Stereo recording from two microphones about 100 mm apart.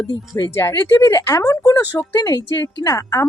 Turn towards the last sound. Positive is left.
turn(degrees=35)  # may be behind; listen again after turning